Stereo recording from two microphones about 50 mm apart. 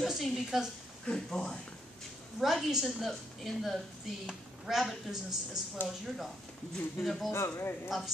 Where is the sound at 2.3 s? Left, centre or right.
Centre.